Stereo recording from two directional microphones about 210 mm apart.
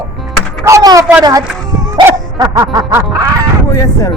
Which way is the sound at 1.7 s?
20° right (ahead or behind).